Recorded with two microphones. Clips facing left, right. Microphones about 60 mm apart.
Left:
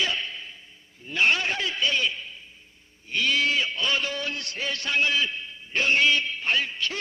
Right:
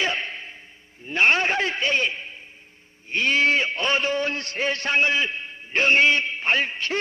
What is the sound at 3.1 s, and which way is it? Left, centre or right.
A man's voice, right.